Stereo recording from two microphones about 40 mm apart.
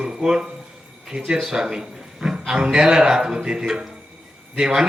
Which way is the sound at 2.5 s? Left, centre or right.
Centre.